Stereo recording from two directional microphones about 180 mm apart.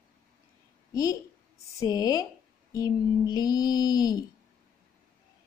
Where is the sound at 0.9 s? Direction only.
20° left (ahead or behind).